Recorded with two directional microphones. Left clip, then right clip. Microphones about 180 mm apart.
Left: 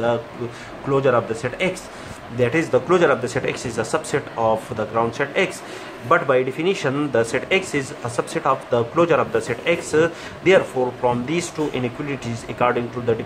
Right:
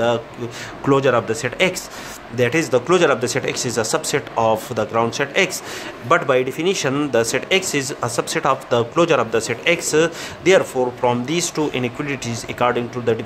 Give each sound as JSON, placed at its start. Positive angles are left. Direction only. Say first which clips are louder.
{"t": 0.8, "sound": "speech", "louder": "right 2 dB", "side_deg": -55}